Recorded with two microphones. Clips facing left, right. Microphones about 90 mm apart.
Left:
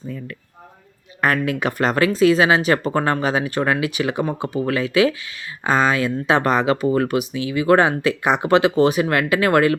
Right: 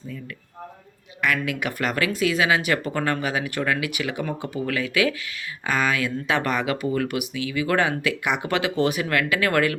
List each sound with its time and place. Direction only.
1.2 s speech: 40° left (ahead or behind)